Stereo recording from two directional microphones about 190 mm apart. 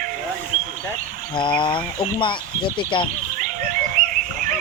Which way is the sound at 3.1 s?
45° right (ahead or behind).